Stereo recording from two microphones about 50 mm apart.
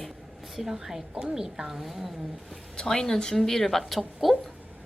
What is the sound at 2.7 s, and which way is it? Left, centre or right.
A woman's voice, centre.